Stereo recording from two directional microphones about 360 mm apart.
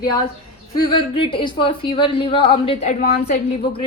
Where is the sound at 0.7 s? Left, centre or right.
Centre.